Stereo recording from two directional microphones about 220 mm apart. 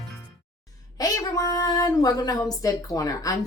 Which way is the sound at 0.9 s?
15° left (ahead or behind).